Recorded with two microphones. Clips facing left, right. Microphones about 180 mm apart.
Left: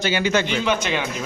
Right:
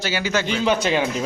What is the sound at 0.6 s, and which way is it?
Speech, 35° right (ahead or behind).